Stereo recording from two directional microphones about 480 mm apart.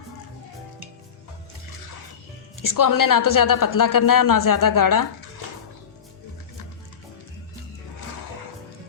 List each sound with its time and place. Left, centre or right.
2.6 s a woman's voice: left